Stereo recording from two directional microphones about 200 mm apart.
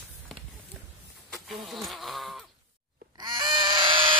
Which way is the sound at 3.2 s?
20° right (ahead or behind).